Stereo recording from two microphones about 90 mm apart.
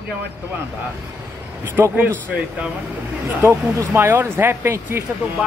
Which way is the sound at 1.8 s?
20° right (ahead or behind).